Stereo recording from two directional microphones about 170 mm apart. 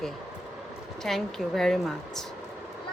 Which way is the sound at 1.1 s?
Centre (ahead or behind).